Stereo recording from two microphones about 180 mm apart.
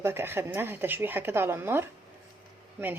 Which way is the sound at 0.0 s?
15° right (ahead or behind).